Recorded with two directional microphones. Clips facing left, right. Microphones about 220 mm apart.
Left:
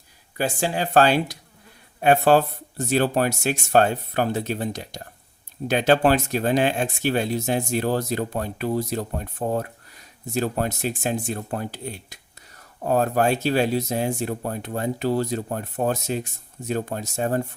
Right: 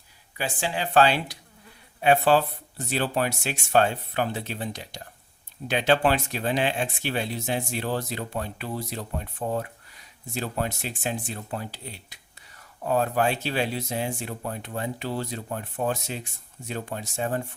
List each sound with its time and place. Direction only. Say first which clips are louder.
0.3 s speech: left 5 dB; 45° left (ahead or behind)